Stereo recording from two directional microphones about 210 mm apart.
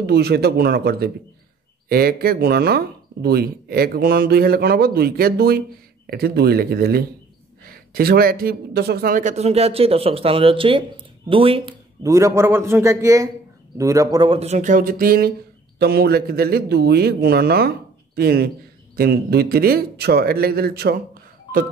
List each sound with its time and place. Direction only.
0.0 s a man's voice: 50° right (ahead or behind); by 11.7 s 25° right (ahead or behind)
12.0 s a man's voice: 15° right (ahead or behind); by 21.0 s 50° right (ahead or behind)